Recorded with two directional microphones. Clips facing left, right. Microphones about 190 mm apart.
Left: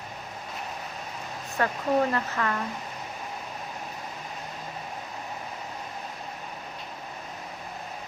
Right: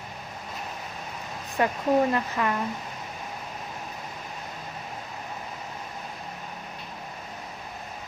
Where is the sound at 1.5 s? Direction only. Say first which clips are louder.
Right 2 dB; 15° right (ahead or behind).